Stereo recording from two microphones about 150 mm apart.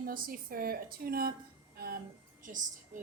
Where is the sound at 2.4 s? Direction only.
60° right (ahead or behind).